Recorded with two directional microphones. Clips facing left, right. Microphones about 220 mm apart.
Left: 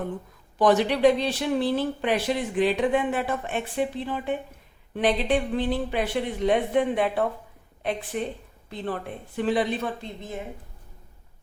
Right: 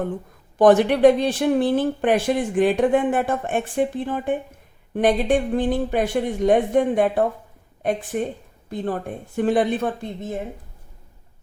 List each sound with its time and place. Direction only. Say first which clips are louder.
0.6 s a woman's voice: right 6 dB; 50° right (ahead or behind)